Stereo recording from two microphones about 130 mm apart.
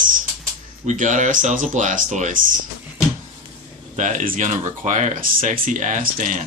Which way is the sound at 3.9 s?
70° right (ahead or behind).